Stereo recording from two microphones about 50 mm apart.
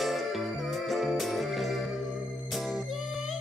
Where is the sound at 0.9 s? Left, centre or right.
Centre.